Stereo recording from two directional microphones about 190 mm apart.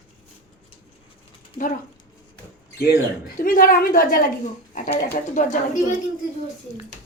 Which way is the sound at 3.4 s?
45° left (ahead or behind).